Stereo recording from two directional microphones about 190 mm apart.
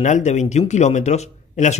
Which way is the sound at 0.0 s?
40° left (ahead or behind).